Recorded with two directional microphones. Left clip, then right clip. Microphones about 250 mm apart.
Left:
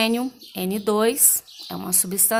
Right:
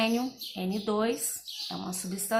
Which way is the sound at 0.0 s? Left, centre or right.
Left.